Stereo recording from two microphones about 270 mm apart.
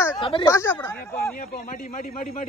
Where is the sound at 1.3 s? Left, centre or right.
Left.